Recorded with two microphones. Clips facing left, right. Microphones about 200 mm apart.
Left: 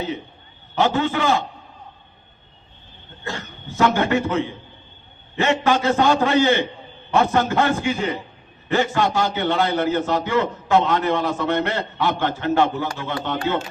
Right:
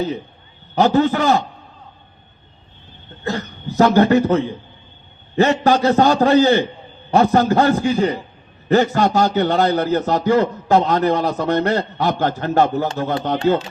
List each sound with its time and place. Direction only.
0.8 s a man's voice: 40° right (ahead or behind)
3.2 s a man's voice: 40° right (ahead or behind)